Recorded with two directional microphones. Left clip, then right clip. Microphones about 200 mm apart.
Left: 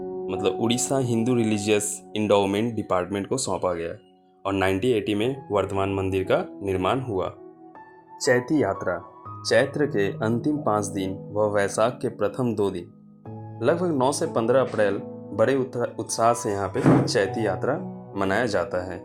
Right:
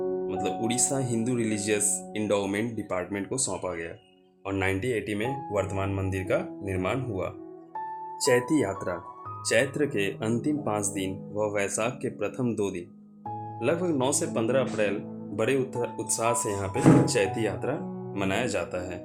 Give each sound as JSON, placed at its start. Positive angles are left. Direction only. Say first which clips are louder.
{"t": 0.3, "sound": "speech", "louder": "left 5 dB", "side_deg": 25}
{"t": 8.2, "sound": "speech", "louder": "left 3 dB", "side_deg": 10}